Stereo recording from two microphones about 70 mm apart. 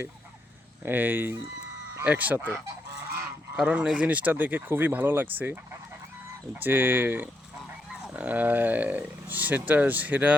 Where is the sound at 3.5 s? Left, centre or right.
Centre.